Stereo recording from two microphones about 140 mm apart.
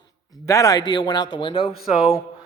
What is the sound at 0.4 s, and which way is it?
A man's voice, 25° left (ahead or behind).